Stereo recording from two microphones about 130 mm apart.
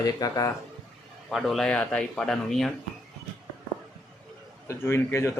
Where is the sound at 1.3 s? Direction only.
Centre (ahead or behind).